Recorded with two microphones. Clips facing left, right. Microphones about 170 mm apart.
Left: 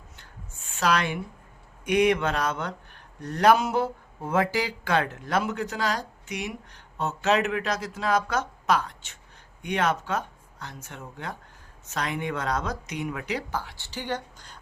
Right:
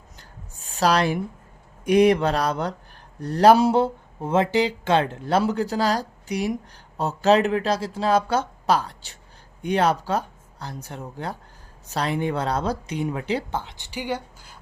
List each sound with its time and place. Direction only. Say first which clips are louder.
0.2 s rub: right 4 dB; 35° right (ahead or behind)
1.8 s speech: right 5 dB; 35° right (ahead or behind); by 14.6 s 10° right (ahead or behind)